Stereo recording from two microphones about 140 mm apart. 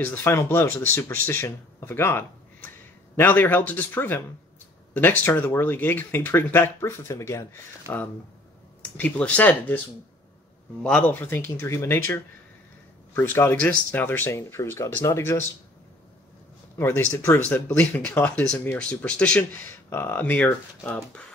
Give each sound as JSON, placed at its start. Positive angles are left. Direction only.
{"t": 0.0, "sound": "speech", "side_deg": 15}
{"t": 10.8, "sound": "speech", "side_deg": 10}
{"t": 13.1, "sound": "speech", "side_deg": 15}
{"t": 16.7, "sound": "speech", "side_deg": 15}